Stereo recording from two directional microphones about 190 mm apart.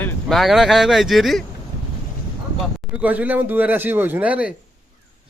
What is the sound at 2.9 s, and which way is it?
Speech, 10° right (ahead or behind).